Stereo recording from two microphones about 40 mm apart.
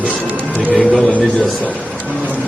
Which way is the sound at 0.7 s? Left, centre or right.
Centre.